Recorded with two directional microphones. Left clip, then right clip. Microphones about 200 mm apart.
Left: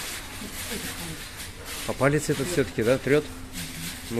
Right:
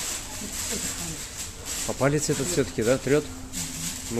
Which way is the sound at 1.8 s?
10° left (ahead or behind).